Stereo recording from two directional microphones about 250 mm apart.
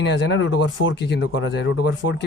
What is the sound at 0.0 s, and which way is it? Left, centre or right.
Speech, left.